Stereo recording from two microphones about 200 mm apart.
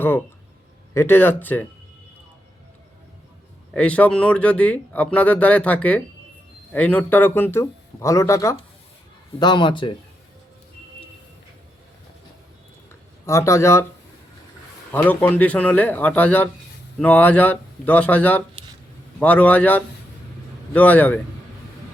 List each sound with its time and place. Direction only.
0.9 s speech: 10° left (ahead or behind)
3.7 s speech: 5° left (ahead or behind); by 9.9 s 25° left (ahead or behind)
13.2 s speech: 15° left (ahead or behind)
14.9 s speech: 10° left (ahead or behind)